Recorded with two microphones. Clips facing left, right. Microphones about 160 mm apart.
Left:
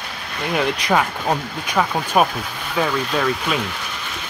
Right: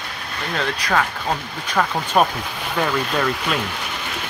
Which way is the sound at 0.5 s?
20° left (ahead or behind).